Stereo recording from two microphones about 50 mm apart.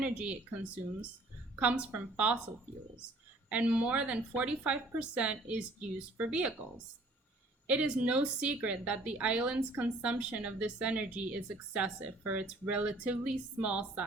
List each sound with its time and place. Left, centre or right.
0.0 s a woman's voice: right
3.5 s a woman's voice: right
7.7 s a woman's voice: right